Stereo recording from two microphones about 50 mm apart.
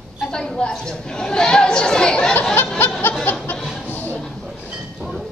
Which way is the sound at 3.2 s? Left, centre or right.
Left.